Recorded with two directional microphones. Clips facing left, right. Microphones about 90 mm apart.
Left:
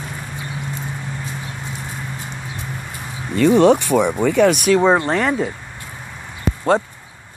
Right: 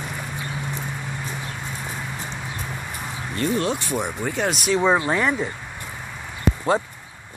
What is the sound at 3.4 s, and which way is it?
Speech, 65° left (ahead or behind).